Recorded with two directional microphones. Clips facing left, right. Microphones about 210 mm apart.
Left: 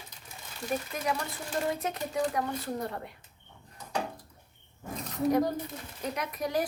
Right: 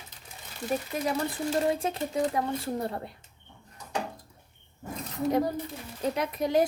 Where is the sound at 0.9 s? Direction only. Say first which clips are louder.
Right 4 dB; 30° right (ahead or behind).